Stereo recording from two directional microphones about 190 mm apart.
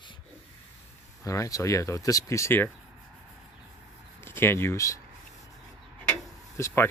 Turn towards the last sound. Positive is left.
turn(degrees=15)  # may be behind; listen again after turning